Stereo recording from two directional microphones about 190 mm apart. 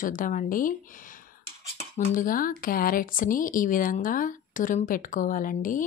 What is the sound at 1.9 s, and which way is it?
Speech, 45° left (ahead or behind).